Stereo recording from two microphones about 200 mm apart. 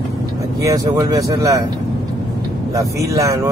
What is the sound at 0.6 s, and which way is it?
Speech, 15° right (ahead or behind).